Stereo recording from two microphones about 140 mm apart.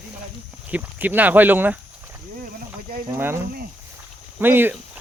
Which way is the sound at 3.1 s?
15° right (ahead or behind).